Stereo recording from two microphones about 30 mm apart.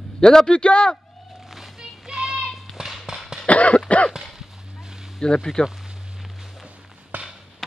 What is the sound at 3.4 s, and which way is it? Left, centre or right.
Cough, left.